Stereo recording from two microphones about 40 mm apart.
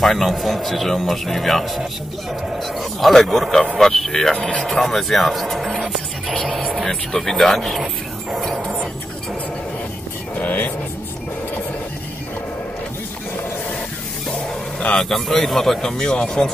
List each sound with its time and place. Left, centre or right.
0.0 s a man's voice: centre
2.8 s a man's voice: centre
4.4 s speech: left
4.6 s speech: centre
7.8 s dog: centre
8.5 s music: centre
10.3 s music: left
14.9 s speech: centre
15.1 s speech: centre